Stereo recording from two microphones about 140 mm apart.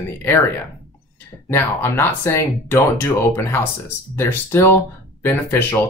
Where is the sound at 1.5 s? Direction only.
15° left (ahead or behind).